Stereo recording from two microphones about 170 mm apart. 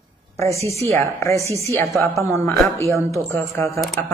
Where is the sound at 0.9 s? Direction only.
15° left (ahead or behind).